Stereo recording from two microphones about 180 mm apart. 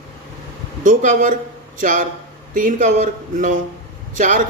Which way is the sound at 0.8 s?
45° right (ahead or behind).